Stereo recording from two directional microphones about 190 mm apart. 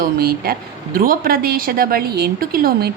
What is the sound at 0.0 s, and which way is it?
A woman's voice, 50° right (ahead or behind).